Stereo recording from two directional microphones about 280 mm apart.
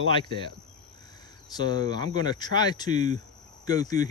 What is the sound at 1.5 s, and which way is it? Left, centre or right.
Speech, centre.